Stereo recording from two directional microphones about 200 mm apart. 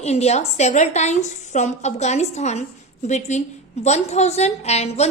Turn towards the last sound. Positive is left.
turn(degrees=35)  # may be behind; listen again after turning